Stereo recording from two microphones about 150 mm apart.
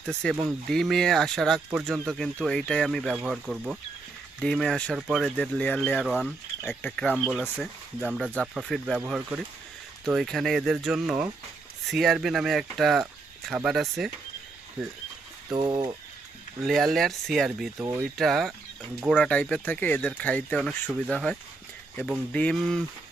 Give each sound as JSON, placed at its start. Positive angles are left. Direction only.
{"t": 0.0, "sound": "speech", "side_deg": 5}
{"t": 6.1, "sound": "speech", "side_deg": -5}
{"t": 6.7, "sound": "speech", "side_deg": 5}
{"t": 9.0, "sound": "speech", "side_deg": -10}
{"t": 15.5, "sound": "speech", "side_deg": -30}
{"t": 16.6, "sound": "speech", "side_deg": 0}
{"t": 17.7, "sound": "speech", "side_deg": -20}
{"t": 18.0, "sound": "speech", "side_deg": 0}